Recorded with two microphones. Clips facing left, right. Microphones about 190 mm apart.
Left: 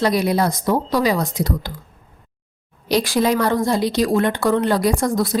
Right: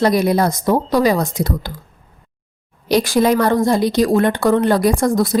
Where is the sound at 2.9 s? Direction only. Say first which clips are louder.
Right 3 dB; 50° right (ahead or behind).